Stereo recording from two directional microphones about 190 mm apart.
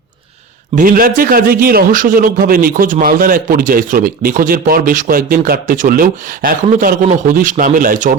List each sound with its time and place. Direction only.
0.8 s a man's voice: 50° right (ahead or behind)